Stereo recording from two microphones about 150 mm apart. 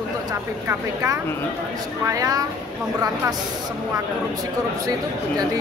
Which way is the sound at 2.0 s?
25° right (ahead or behind).